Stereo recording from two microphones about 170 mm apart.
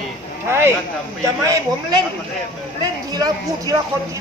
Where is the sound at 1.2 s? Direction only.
20° right (ahead or behind).